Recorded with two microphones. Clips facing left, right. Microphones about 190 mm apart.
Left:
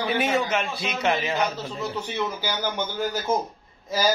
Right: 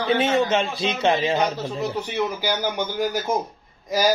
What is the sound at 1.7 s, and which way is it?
Speech, 15° right (ahead or behind).